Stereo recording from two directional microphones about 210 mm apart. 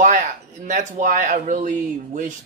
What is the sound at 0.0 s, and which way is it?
Speech, 35° right (ahead or behind).